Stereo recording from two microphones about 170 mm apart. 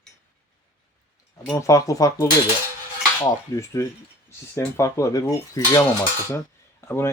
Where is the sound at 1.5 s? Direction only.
20° left (ahead or behind).